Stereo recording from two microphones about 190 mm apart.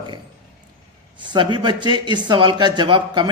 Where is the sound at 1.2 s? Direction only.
25° right (ahead or behind).